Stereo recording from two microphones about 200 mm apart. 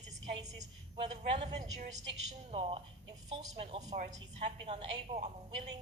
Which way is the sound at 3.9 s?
40° right (ahead or behind).